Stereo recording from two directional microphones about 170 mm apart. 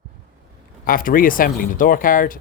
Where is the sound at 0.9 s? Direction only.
55° left (ahead or behind).